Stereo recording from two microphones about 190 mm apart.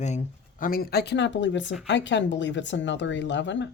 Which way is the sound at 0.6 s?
50° left (ahead or behind).